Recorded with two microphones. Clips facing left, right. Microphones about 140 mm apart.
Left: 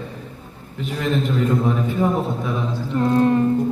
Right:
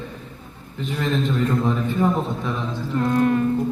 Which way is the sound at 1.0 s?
5° left (ahead or behind).